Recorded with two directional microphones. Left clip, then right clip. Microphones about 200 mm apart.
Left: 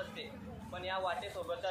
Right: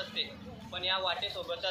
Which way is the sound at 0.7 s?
Centre (ahead or behind).